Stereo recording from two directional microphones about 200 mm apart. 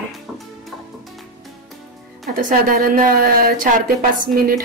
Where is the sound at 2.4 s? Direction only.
45° right (ahead or behind).